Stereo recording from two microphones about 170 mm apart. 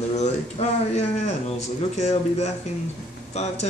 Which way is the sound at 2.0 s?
40° left (ahead or behind).